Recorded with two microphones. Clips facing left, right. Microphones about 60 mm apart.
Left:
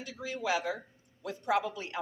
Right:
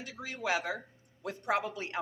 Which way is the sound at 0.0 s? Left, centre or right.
Right.